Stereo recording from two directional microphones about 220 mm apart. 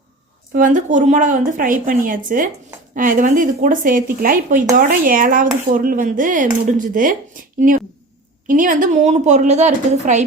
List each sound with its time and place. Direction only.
0.5 s a woman's voice: 35° right (ahead or behind)